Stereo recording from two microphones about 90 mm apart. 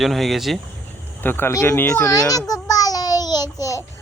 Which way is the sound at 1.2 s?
25° left (ahead or behind).